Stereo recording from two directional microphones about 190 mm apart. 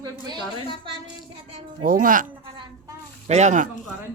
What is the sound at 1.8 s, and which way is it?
Speech, 45° right (ahead or behind).